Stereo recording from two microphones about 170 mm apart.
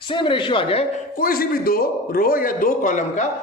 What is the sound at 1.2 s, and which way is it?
A man's voice, 60° left (ahead or behind).